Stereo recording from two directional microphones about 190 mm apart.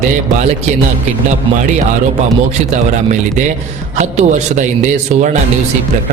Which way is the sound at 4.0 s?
40° right (ahead or behind).